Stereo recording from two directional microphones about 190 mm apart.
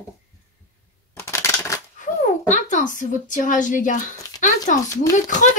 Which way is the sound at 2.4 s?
40° left (ahead or behind).